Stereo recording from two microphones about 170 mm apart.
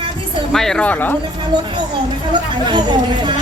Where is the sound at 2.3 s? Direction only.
25° right (ahead or behind).